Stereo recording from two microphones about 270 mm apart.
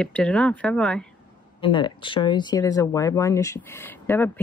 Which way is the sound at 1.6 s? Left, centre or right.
Centre.